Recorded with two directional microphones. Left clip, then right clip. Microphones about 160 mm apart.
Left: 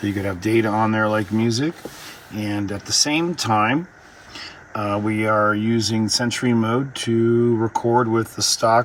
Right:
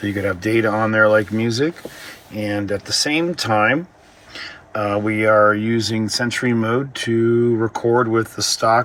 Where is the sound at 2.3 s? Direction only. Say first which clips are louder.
Right 4 dB; 20° left (ahead or behind).